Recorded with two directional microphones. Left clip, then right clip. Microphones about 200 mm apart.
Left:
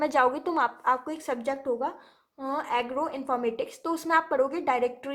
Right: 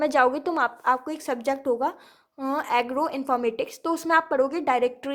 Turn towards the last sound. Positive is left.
turn(degrees=-25)  # may be behind; listen again after turning